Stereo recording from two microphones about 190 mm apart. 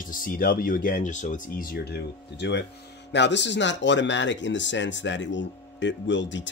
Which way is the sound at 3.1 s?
65° left (ahead or behind).